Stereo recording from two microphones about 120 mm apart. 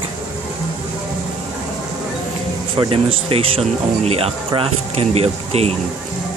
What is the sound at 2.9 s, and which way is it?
Speech, 50° right (ahead or behind).